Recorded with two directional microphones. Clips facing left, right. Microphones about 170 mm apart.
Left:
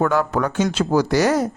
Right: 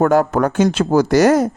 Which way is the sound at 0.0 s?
45° right (ahead or behind).